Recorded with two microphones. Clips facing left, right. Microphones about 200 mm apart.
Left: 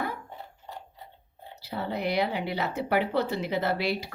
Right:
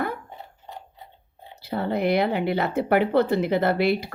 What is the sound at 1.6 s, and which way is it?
A woman's voice, 55° right (ahead or behind).